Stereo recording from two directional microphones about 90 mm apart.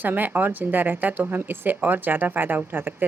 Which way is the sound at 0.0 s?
20° right (ahead or behind).